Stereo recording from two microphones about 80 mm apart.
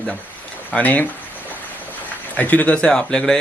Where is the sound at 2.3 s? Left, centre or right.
Centre.